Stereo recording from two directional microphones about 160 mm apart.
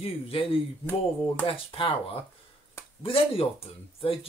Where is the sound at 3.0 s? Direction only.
35° left (ahead or behind).